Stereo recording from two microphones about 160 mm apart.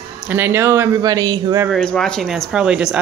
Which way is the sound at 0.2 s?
15° right (ahead or behind).